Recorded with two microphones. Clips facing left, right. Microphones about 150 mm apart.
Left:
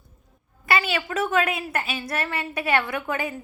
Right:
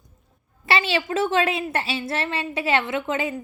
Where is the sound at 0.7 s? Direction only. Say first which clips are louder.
Right 2 dB; 30° right (ahead or behind).